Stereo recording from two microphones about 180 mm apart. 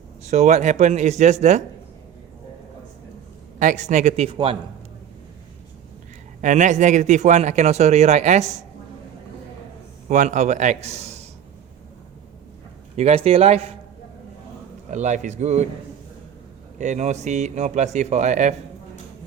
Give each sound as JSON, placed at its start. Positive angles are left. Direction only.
{"t": 0.3, "sound": "a man's voice", "side_deg": -40}
{"t": 3.6, "sound": "a man's voice", "side_deg": -45}
{"t": 6.4, "sound": "a man's voice", "side_deg": -45}
{"t": 10.1, "sound": "a man's voice", "side_deg": -40}
{"t": 13.0, "sound": "a man's voice", "side_deg": -35}
{"t": 14.8, "sound": "a man's voice", "side_deg": -40}
{"t": 16.7, "sound": "a man's voice", "side_deg": -40}